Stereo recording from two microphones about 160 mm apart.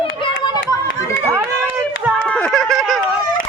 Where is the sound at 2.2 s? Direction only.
5° left (ahead or behind).